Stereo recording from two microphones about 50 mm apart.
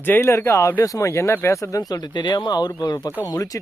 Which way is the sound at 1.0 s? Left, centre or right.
Left.